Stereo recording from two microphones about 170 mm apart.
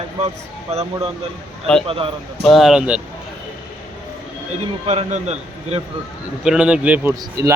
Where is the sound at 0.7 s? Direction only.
40° right (ahead or behind).